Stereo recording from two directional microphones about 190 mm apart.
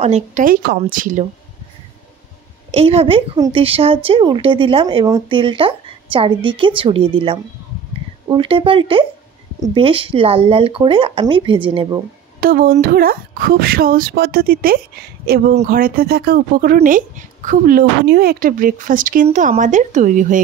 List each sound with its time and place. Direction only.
0.0 s speech: 40° right (ahead or behind)
2.7 s a woman's voice: 30° right (ahead or behind)
12.4 s speech: 50° right (ahead or behind)